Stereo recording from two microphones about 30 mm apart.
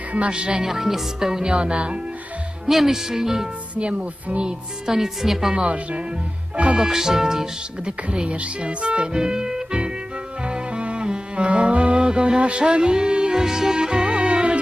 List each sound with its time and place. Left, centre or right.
0.3 s music: right
0.6 s speech: centre
1.5 s music: right
2.6 s speech: centre
3.8 s music: right
4.9 s speech: centre
5.5 s speech: right
6.7 s speech: centre
8.1 s music: right
9.1 s music: right
10.4 s music: right
12.0 s music: right
13.4 s music: right